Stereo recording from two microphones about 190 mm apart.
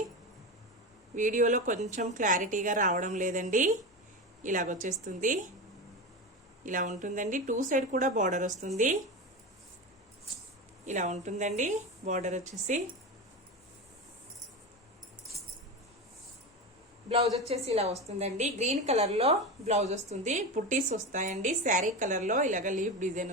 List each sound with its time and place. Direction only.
1.1 s a woman's voice: 45° right (ahead or behind)
6.7 s a woman's voice: 40° right (ahead or behind)
10.8 s a woman's voice: 40° right (ahead or behind)
17.5 s a woman's voice: 30° right (ahead or behind)